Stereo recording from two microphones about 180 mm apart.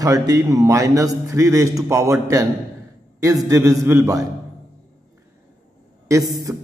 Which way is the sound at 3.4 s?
15° right (ahead or behind).